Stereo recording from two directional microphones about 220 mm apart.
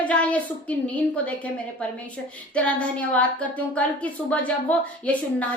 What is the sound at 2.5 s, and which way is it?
A woman's voice, 5° left (ahead or behind).